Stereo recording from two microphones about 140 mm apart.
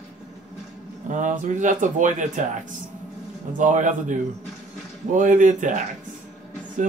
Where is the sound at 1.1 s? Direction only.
65° right (ahead or behind).